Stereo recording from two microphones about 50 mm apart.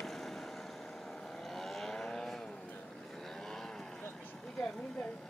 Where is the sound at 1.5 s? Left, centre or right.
Centre.